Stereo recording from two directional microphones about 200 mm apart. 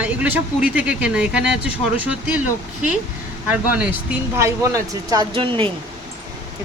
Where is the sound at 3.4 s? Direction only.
10° right (ahead or behind); by 5.6 s 25° right (ahead or behind).